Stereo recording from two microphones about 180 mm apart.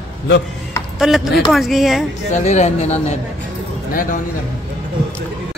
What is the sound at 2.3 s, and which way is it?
Speech, 40° left (ahead or behind).